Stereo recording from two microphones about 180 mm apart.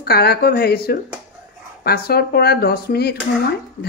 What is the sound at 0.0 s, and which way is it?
Speech, 60° left (ahead or behind).